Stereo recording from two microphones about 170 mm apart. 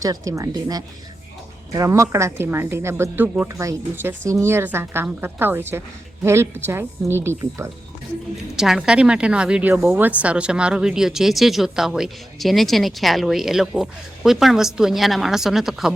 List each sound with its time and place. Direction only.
0.0 s speech: 20° right (ahead or behind)
8.5 s a woman's voice: 5° right (ahead or behind)